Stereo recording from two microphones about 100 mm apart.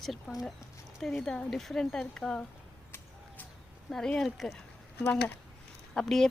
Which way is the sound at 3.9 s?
5° left (ahead or behind).